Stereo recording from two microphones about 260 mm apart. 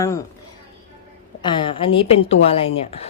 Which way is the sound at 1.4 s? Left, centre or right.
Centre.